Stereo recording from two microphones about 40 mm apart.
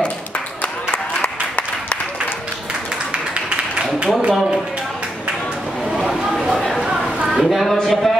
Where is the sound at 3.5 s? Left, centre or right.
Right.